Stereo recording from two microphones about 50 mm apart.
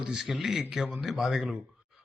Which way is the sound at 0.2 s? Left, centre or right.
Centre.